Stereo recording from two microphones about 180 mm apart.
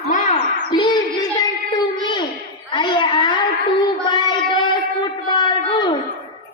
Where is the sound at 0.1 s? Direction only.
40° left (ahead or behind).